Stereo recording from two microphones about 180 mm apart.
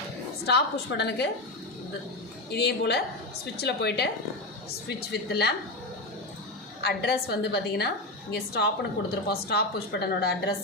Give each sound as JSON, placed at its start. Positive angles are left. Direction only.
{"t": 0.4, "sound": "a woman's voice", "side_deg": 70}
{"t": 2.5, "sound": "a woman's voice", "side_deg": 65}
{"t": 6.8, "sound": "a woman's voice", "side_deg": 65}